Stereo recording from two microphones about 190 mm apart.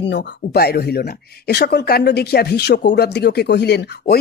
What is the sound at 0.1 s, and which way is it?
Speech, 60° left (ahead or behind).